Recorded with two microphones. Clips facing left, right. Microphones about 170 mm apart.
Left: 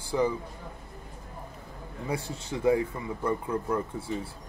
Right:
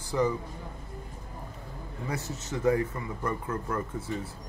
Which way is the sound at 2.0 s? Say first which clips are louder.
Left 2 dB; 10° left (ahead or behind).